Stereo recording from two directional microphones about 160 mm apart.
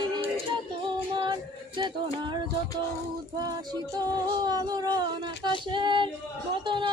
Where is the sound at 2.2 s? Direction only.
30° right (ahead or behind).